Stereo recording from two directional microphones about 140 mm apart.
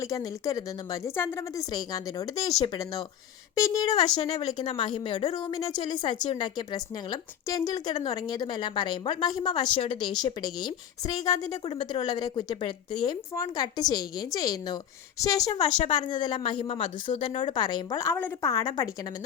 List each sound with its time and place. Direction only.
0.0 s speech: 25° left (ahead or behind)
3.5 s a woman's voice: 25° left (ahead or behind)
18.4 s speech: 25° left (ahead or behind)